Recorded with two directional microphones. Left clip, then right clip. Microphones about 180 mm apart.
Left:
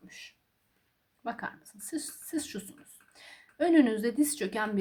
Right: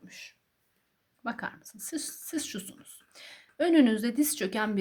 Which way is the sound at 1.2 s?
30° right (ahead or behind).